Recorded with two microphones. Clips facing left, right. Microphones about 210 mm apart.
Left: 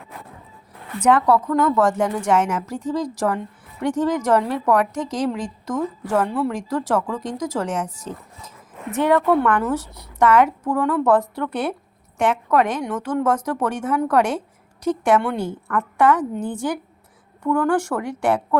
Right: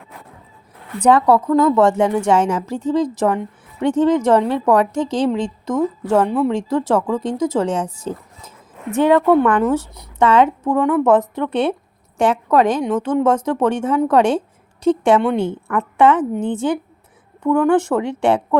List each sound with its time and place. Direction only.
1.0 s speech: 30° right (ahead or behind)